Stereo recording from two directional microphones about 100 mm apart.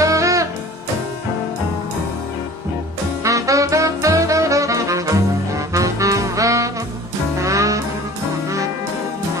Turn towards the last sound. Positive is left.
turn(degrees=-35)  # may be behind; listen again after turning